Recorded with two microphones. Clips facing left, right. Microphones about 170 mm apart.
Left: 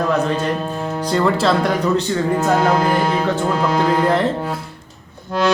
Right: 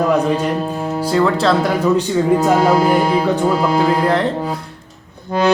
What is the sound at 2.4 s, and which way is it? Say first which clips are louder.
Speech: right 3 dB; 10° right (ahead or behind).